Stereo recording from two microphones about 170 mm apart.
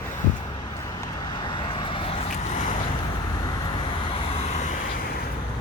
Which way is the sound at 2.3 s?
50° left (ahead or behind).